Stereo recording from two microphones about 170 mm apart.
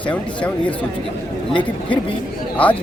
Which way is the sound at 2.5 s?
10° left (ahead or behind).